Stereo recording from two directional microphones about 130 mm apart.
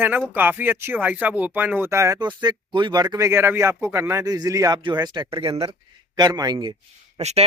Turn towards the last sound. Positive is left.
turn(degrees=-60)  # may be behind; listen again after turning